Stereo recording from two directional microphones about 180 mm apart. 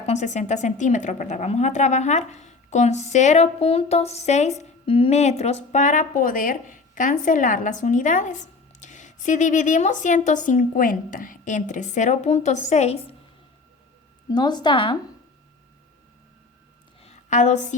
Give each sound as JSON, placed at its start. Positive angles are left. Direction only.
{"t": 0.0, "sound": "a woman's voice", "side_deg": 40}
{"t": 14.3, "sound": "a woman's voice", "side_deg": 25}
{"t": 17.0, "sound": "a sound", "side_deg": 40}